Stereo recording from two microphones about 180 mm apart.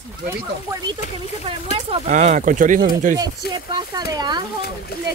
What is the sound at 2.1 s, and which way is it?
Speech, 45° right (ahead or behind).